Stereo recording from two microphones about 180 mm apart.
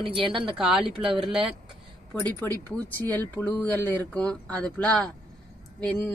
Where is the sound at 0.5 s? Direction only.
Centre (ahead or behind).